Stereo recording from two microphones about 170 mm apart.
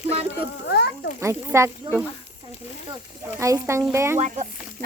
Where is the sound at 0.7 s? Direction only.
75° left (ahead or behind).